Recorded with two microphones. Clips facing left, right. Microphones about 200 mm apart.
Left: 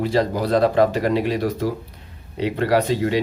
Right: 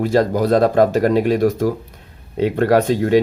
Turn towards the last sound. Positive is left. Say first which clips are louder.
# right 4 dB
turn(degrees=-50)  # may be behind; listen again after turning